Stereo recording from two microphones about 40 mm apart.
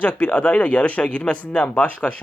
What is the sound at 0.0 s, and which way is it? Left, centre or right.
Speech, left.